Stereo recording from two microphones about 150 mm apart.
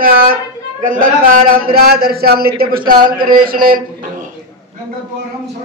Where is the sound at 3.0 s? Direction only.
70° right (ahead or behind).